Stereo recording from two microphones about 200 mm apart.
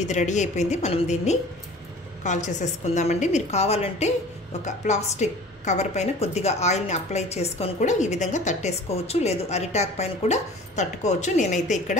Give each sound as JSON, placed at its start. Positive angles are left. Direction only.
{"t": 0.0, "sound": "a woman's voice", "side_deg": 35}